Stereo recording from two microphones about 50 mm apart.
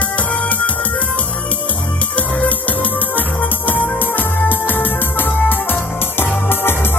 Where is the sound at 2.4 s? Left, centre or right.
Left.